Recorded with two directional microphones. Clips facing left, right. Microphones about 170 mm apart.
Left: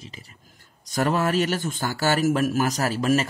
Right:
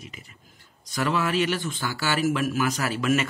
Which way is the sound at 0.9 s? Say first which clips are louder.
Left 3 dB; 45° left (ahead or behind).